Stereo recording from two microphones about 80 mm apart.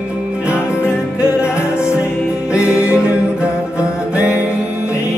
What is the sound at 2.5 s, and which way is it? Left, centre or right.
Music, centre.